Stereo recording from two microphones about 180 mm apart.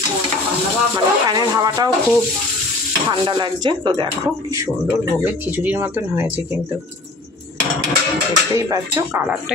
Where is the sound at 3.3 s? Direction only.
25° right (ahead or behind); by 6.6 s 10° right (ahead or behind).